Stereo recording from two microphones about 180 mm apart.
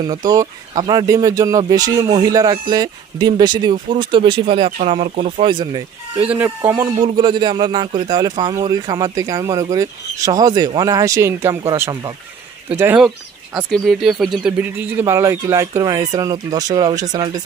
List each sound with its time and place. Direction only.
0.0 s a man's voice: 20° right (ahead or behind)
6.2 s speech: 10° right (ahead or behind)
6.8 s a man's voice: 20° right (ahead or behind)